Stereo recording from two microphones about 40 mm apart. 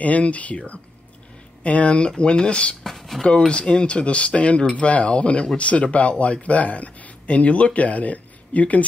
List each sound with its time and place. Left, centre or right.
0.0 s speech: left
2.8 s speech: centre
3.2 s speech: left